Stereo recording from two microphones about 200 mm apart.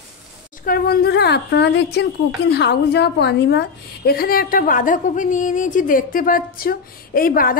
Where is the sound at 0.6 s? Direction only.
50° left (ahead or behind).